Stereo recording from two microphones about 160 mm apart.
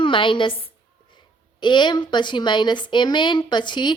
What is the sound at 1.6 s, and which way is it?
A woman's voice, 30° left (ahead or behind).